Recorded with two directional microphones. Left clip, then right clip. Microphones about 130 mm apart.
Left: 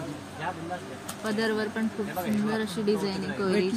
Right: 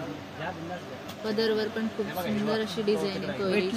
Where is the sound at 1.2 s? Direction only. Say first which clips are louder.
Right 1 dB; 90° left.